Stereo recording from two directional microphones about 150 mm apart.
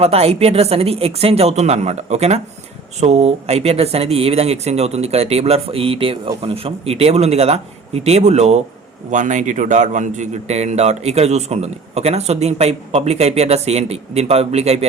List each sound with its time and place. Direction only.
0.0 s a man's voice: 45° right (ahead or behind)